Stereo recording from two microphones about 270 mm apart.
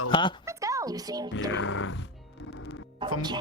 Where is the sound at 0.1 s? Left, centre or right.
Centre.